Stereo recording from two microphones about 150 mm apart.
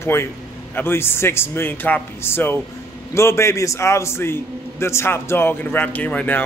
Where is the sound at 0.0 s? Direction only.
15° left (ahead or behind).